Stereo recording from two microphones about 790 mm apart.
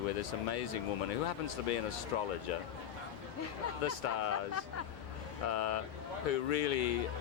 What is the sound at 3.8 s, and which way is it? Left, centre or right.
Speech, left.